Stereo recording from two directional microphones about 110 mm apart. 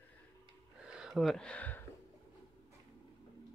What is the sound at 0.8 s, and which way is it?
Speech, 5° right (ahead or behind).